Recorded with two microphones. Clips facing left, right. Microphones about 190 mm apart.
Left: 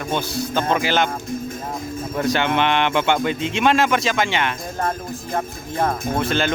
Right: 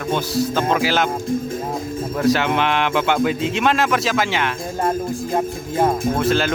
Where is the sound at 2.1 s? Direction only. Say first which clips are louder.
Right 2 dB; centre (ahead or behind).